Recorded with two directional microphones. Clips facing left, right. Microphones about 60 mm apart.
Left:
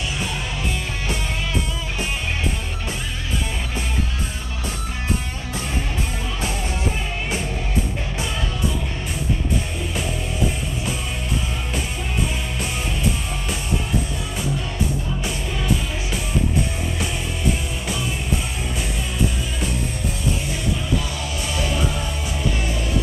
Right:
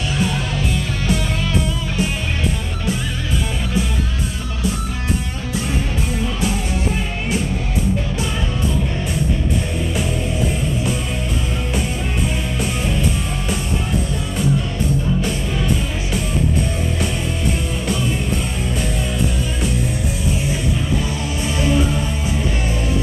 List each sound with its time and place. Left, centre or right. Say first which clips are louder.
21.5 s music: right 7 dB; right